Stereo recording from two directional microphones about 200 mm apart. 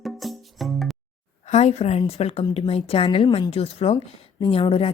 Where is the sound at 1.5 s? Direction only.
35° left (ahead or behind).